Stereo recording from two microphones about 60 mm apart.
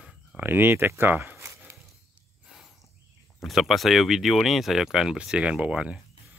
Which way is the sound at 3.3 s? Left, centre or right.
Centre.